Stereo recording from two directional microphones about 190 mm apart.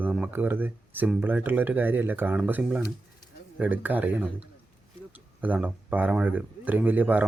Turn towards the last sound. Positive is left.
turn(degrees=-10)  # may be behind; listen again after turning